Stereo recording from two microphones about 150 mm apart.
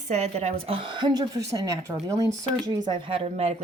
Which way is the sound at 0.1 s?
50° right (ahead or behind).